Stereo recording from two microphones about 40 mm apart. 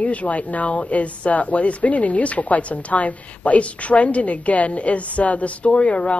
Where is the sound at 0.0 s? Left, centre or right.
Left.